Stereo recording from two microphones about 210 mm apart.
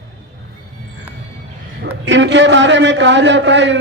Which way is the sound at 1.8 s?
60° right (ahead or behind).